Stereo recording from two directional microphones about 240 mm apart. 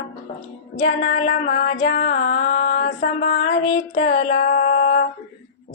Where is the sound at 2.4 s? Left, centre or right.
Left.